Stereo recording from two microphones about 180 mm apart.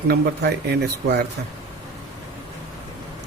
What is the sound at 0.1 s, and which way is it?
A man's voice, 60° right (ahead or behind).